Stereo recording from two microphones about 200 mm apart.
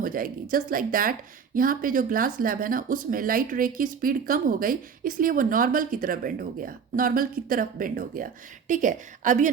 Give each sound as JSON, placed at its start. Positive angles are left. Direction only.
{"t": 0.0, "sound": "speech", "side_deg": -45}